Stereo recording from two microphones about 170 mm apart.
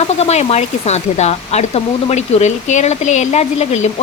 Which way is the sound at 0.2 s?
40° left (ahead or behind).